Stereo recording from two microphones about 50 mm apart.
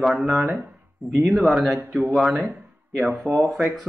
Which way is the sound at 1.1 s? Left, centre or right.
Right.